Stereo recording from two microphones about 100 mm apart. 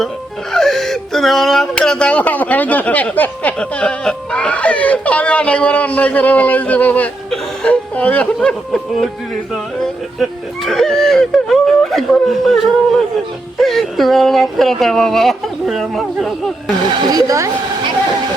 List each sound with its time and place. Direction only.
0.5 s speech: 5° left (ahead or behind)
7.3 s chuckle: 10° left (ahead or behind)
8.4 s speech: 5° left (ahead or behind)
10.7 s speech: 5° left (ahead or behind)
17.1 s speech: 40° right (ahead or behind)